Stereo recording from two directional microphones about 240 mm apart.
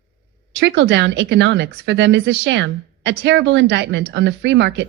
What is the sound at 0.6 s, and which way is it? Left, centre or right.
Speech, right.